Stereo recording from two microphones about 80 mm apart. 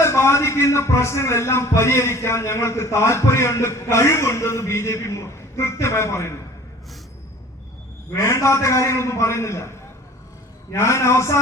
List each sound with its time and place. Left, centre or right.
0.0 s a man's voice: left
8.1 s a man's voice: left